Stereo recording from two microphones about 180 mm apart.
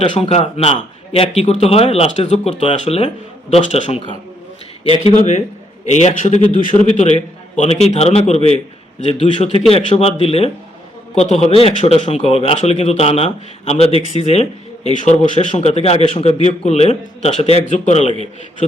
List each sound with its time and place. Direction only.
0.0 s a man's voice: 35° left (ahead or behind)
5.9 s a man's voice: 40° left (ahead or behind)